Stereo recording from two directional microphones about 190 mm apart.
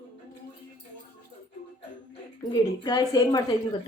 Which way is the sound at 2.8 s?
20° left (ahead or behind).